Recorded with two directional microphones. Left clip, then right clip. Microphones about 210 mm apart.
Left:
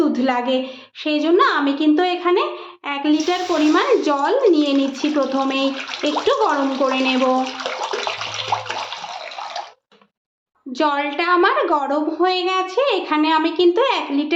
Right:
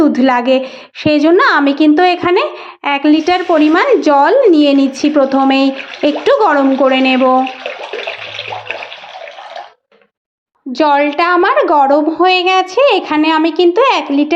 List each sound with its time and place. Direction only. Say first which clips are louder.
0.0 s a woman's voice: right 8 dB; 35° right (ahead or behind)
10.7 s a woman's voice: right 9 dB; 30° right (ahead or behind)